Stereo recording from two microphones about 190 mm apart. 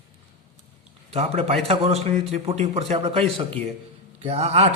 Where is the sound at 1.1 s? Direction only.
30° right (ahead or behind).